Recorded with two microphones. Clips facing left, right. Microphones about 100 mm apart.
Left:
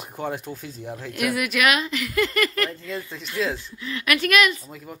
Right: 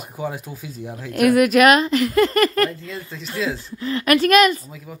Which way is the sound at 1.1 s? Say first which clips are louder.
Right 10 dB; 45° right (ahead or behind).